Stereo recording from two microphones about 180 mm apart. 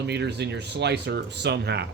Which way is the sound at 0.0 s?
70° right (ahead or behind).